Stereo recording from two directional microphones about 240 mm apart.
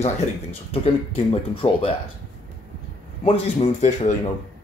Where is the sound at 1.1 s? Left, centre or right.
Left.